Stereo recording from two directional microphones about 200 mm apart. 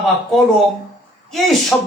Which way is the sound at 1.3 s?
Centre (ahead or behind).